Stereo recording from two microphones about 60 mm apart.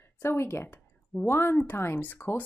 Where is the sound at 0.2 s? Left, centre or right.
Left.